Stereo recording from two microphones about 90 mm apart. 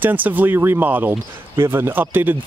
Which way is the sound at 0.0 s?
20° right (ahead or behind).